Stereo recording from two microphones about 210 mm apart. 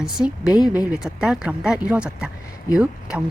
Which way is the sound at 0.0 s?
Centre (ahead or behind).